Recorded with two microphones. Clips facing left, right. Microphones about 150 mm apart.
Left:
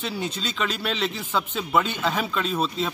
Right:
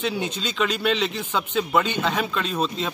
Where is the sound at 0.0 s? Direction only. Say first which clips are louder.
Right 3 dB; centre (ahead or behind).